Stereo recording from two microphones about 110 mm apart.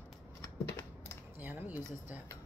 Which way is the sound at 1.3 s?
15° right (ahead or behind).